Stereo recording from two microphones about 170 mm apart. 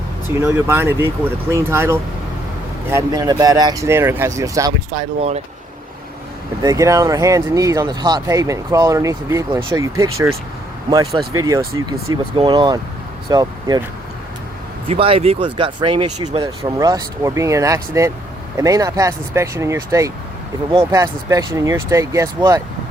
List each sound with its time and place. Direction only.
0.3 s speech: 15° right (ahead or behind)
4.9 s speech: 35° right (ahead or behind)
6.6 s speech: 20° right (ahead or behind)
14.8 s speech: 35° right (ahead or behind)